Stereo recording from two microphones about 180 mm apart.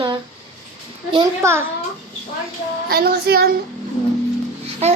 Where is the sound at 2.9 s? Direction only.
60° right (ahead or behind).